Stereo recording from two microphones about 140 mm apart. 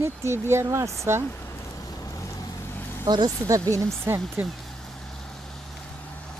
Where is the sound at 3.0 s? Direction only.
30° right (ahead or behind).